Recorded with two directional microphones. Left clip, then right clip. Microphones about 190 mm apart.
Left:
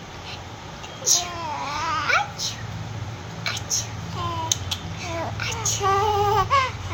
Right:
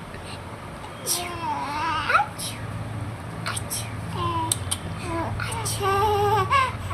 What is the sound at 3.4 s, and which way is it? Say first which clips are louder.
Whispering: left 3 dB; 25° left (ahead or behind).